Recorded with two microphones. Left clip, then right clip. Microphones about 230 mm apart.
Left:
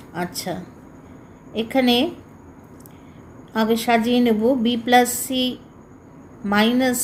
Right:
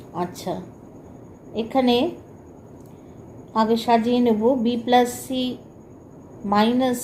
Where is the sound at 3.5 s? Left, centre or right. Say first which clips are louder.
Even; left.